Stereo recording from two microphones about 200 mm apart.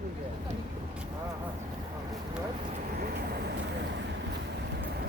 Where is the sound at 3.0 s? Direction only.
50° right (ahead or behind).